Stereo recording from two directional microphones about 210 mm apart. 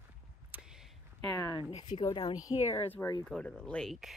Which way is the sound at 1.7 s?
25° left (ahead or behind).